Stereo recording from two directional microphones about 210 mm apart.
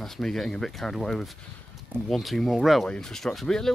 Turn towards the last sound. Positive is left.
turn(degrees=0)  # may be behind; listen again after turning